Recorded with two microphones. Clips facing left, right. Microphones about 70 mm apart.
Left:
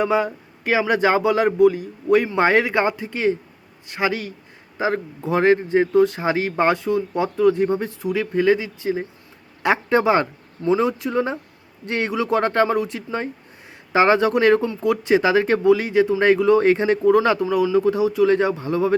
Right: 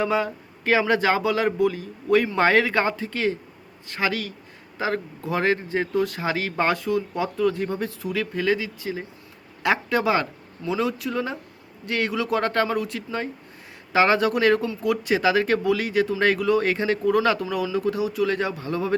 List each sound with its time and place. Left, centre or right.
0.0 s speech: left